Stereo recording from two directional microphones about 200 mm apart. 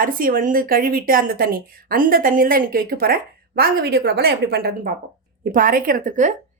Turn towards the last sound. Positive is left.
turn(degrees=-40)  # may be behind; listen again after turning